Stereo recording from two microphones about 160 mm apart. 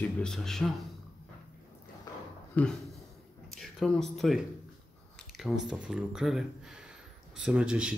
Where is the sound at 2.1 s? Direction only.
25° left (ahead or behind).